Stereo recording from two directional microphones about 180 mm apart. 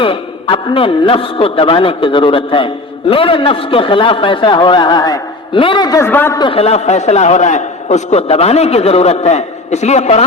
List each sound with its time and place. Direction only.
0.0 s a man's voice: 30° left (ahead or behind); by 6.4 s 10° left (ahead or behind)
6.4 s a man's voice: 30° left (ahead or behind)